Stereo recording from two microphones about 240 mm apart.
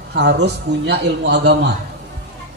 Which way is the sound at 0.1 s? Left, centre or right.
Right.